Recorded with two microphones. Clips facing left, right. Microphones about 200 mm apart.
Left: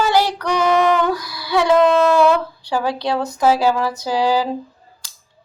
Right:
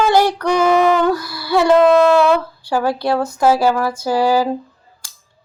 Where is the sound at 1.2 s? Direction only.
15° left (ahead or behind).